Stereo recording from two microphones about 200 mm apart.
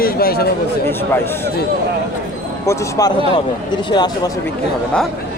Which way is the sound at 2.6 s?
15° left (ahead or behind).